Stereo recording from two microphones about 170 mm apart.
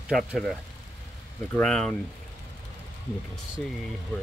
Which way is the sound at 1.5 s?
5° left (ahead or behind).